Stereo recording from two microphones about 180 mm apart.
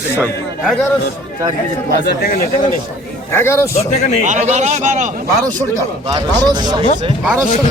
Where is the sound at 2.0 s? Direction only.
60° left (ahead or behind).